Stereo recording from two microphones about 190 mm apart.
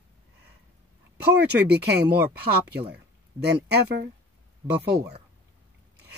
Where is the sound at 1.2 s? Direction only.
60° right (ahead or behind).